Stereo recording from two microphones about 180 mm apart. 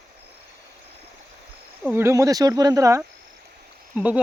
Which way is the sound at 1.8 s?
15° right (ahead or behind).